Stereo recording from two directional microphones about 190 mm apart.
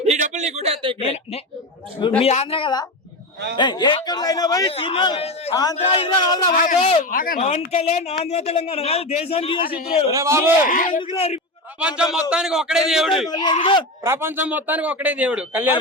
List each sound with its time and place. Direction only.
0.0 s a sound: 40° right (ahead or behind)
1.0 s a man's voice: 30° left (ahead or behind)
6.5 s speech: 45° left (ahead or behind)
6.7 s a man's voice: 30° left (ahead or behind)
7.0 s a man's voice: 45° left (ahead or behind); by 9.7 s 30° left (ahead or behind)
10.1 s a man's voice: 15° right (ahead or behind)
10.7 s speech: 45° left (ahead or behind)
11.0 s a man's voice: 30° left (ahead or behind)
11.8 s a man's voice: 5° right (ahead or behind)
13.3 s speech: 20° left (ahead or behind)
14.0 s a man's voice: 15° right (ahead or behind)